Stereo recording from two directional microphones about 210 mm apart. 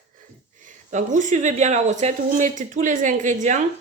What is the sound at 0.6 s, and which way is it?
A woman's voice, 35° right (ahead or behind).